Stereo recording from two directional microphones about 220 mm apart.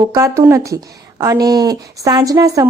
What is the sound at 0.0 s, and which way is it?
Speech, 15° right (ahead or behind).